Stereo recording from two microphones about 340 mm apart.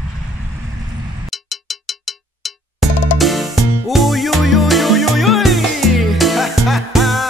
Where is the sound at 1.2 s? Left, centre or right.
Centre.